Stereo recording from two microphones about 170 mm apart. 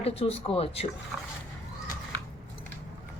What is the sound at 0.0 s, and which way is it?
Speech, 35° left (ahead or behind).